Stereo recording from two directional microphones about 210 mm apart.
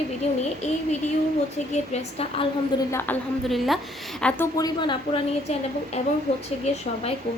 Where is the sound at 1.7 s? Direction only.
30° left (ahead or behind).